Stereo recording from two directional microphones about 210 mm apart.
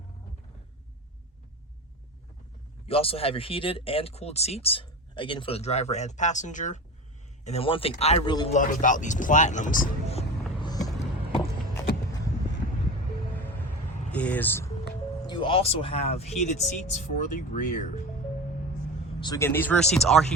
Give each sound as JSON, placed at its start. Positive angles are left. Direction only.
{"t": 2.8, "sound": "speech", "side_deg": 25}
{"t": 8.5, "sound": "speech", "side_deg": 40}
{"t": 11.0, "sound": "vehicle", "side_deg": 25}
{"t": 14.1, "sound": "speech", "side_deg": 5}
{"t": 15.3, "sound": "speech", "side_deg": 25}
{"t": 19.2, "sound": "speech", "side_deg": 15}